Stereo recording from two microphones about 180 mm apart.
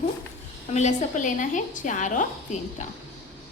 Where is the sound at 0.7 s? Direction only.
40° left (ahead or behind).